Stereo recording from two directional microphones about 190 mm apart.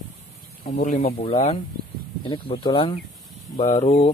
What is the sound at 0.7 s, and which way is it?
Speech, 50° left (ahead or behind).